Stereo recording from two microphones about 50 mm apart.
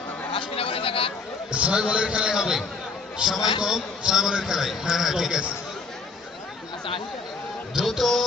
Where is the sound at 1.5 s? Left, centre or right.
Right; by 5.4 s centre.